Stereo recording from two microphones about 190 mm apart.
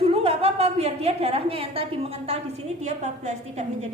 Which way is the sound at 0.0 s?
30° right (ahead or behind).